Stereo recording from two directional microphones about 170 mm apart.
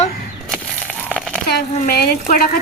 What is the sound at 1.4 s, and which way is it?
Speech, 65° left (ahead or behind).